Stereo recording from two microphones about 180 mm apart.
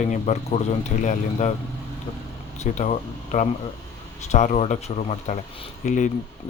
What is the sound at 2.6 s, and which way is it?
Speech, 40° left (ahead or behind).